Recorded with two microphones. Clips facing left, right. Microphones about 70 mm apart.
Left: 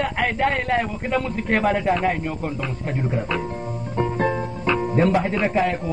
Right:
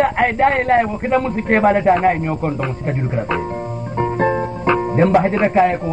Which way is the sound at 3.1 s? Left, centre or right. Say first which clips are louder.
Right 6 dB; right.